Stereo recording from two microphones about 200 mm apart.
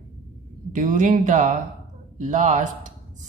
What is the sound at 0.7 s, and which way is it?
A woman's voice, 40° right (ahead or behind).